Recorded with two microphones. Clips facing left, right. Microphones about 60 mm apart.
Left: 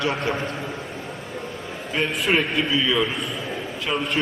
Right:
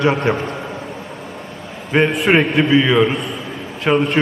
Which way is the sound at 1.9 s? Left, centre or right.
Right.